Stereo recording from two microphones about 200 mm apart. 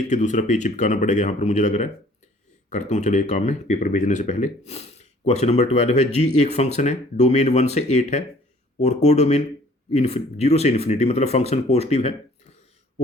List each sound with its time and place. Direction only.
0.1 s speech: 35° left (ahead or behind)